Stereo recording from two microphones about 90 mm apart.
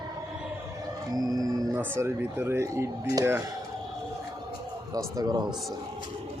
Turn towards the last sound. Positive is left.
turn(degrees=-45)  # may be behind; listen again after turning